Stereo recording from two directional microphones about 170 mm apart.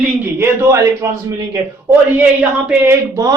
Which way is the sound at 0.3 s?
15° right (ahead or behind).